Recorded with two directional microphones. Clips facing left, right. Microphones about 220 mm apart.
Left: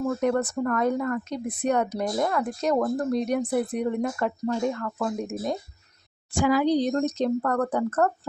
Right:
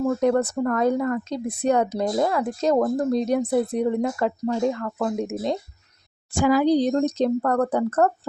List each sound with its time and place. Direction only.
0.0 s speech: 30° right (ahead or behind)
6.4 s speech: 40° right (ahead or behind)